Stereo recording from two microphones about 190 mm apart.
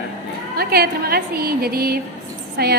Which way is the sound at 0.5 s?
55° right (ahead or behind).